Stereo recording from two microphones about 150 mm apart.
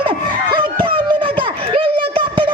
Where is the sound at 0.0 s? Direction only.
35° right (ahead or behind).